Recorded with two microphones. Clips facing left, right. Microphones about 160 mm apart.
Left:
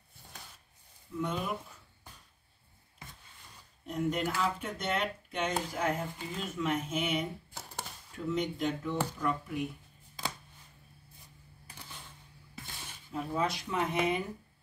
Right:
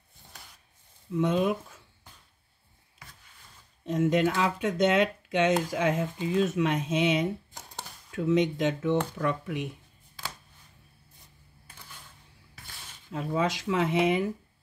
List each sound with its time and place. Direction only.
1.1 s speech: 90° right
3.8 s speech: 90° right
6.3 s speech: 80° right
13.1 s speech: 90° right